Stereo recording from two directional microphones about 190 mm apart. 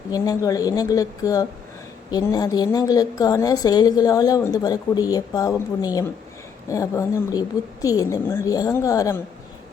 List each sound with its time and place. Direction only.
0.1 s a woman's voice: 20° left (ahead or behind)